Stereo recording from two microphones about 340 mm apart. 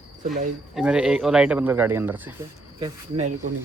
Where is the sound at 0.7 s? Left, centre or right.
Centre; by 3.5 s right.